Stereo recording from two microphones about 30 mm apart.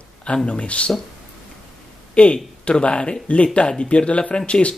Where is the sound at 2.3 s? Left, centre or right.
Left.